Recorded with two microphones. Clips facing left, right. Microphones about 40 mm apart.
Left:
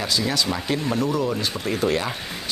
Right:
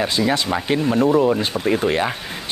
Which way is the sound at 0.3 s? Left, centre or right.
Right.